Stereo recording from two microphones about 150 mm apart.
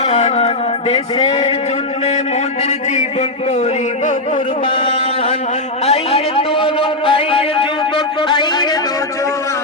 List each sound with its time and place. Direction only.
0.0 s speech: 45° left (ahead or behind)
2.6 s a man's voice: 50° left (ahead or behind)
4.7 s a sound: 40° left (ahead or behind)
5.8 s a man's voice: 45° left (ahead or behind)